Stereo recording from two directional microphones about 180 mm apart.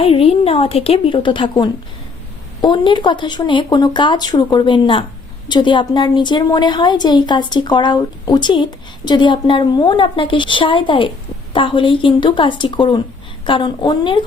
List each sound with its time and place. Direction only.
0.0 s a woman's voice: 30° left (ahead or behind)